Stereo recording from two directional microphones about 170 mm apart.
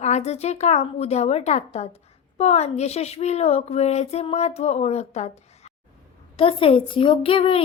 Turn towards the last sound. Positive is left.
turn(degrees=30)  # may be behind; listen again after turning